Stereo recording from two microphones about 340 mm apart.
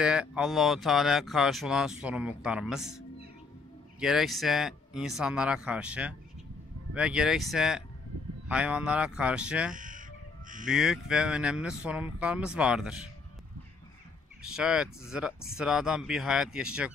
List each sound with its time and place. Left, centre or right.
0.0 s speech: centre
9.8 s crow: right
10.6 s speech: centre
14.5 s speech: centre